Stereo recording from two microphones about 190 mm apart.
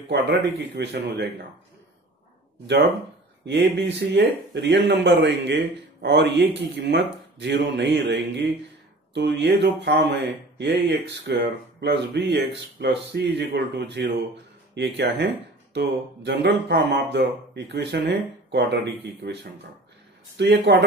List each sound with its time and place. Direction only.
0.1 s speech: 60° right (ahead or behind)
2.6 s speech: 65° right (ahead or behind)
20.3 s speech: 65° right (ahead or behind)